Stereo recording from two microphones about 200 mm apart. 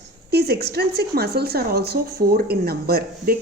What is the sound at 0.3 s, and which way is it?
A woman's voice, 55° right (ahead or behind).